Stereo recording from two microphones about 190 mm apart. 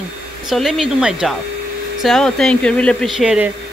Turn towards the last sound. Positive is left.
turn(degrees=-5)  # may be behind; listen again after turning